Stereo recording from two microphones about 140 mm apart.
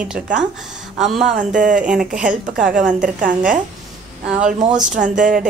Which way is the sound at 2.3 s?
70° right (ahead or behind).